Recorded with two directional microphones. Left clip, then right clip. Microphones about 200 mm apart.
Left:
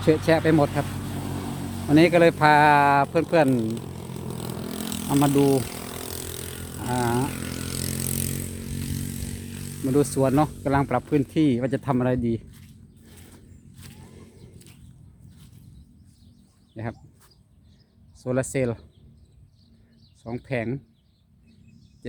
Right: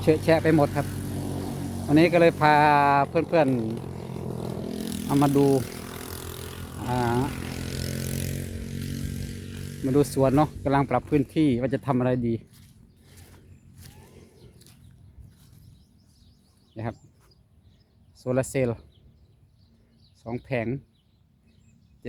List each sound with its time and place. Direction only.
0.3 s speech: 5° left (ahead or behind)
0.9 s vehicle: 35° left (ahead or behind)
1.9 s speech: 10° left (ahead or behind)
3.5 s vehicle: 25° left (ahead or behind)
5.0 s speech: centre (ahead or behind)
5.4 s vehicle: 35° left (ahead or behind); by 6.9 s 55° left (ahead or behind)
6.9 s speech: 5° left (ahead or behind)
7.3 s vehicle: 60° left (ahead or behind)
9.9 s speech: centre (ahead or behind)
16.7 s bird: 5° right (ahead or behind)
18.2 s speech: centre (ahead or behind)
20.2 s speech: centre (ahead or behind)